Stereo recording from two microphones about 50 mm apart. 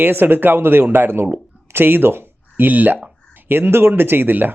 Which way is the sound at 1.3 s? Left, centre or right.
Right.